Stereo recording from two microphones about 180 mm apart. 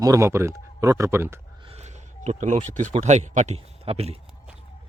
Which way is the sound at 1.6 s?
40° right (ahead or behind).